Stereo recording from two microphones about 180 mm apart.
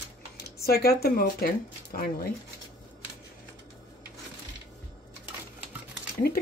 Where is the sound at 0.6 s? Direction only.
60° left (ahead or behind).